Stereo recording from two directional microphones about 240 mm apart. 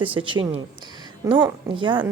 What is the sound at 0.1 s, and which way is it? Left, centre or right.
Speech, right.